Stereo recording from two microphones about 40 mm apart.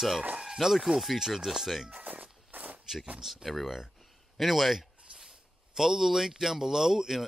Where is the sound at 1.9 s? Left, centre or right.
Right.